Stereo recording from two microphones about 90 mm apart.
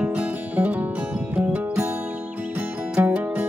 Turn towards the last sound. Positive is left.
turn(degrees=-20)  # may be behind; listen again after turning